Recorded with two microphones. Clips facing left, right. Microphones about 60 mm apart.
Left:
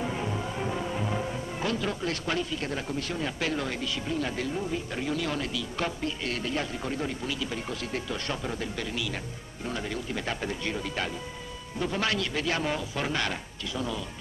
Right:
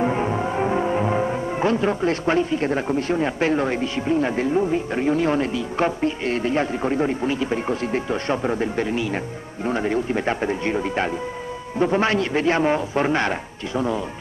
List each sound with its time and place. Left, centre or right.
0.0 s speech: right